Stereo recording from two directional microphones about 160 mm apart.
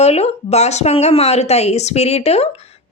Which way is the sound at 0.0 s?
40° left (ahead or behind).